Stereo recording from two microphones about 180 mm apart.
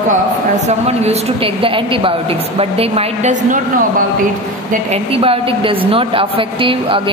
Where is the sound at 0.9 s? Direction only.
35° right (ahead or behind).